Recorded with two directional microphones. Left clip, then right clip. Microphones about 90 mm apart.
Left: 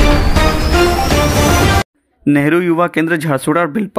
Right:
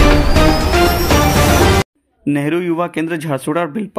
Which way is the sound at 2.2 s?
40° left (ahead or behind).